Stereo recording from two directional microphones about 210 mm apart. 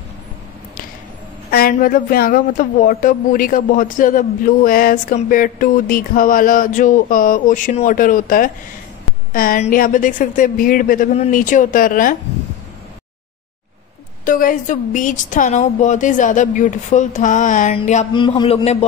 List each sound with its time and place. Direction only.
1.5 s speech: 45° left (ahead or behind)
14.2 s speech: 40° left (ahead or behind)
18.1 s a man's voice: 20° left (ahead or behind)